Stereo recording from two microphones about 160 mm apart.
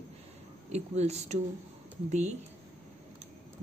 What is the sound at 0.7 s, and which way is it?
Speech, 45° right (ahead or behind).